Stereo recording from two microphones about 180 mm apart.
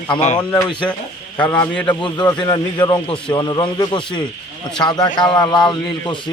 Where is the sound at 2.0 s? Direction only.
25° left (ahead or behind).